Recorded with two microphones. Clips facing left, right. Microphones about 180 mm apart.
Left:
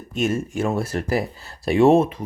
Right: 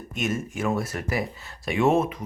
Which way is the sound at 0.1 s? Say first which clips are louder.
Left 6 dB; 30° left (ahead or behind).